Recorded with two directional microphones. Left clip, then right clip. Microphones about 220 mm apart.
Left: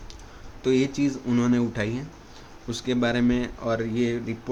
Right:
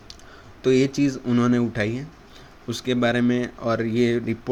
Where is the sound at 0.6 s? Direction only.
20° right (ahead or behind).